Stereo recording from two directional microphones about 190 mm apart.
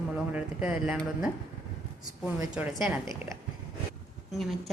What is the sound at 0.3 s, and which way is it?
Speech, 5° right (ahead or behind).